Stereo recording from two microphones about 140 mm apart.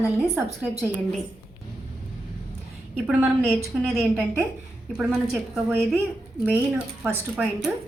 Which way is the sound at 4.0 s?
20° right (ahead or behind).